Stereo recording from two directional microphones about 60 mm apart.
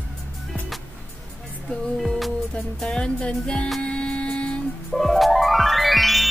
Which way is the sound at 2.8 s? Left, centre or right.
Centre.